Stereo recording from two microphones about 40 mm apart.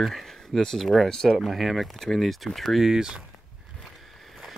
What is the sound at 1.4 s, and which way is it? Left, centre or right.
Speech, centre.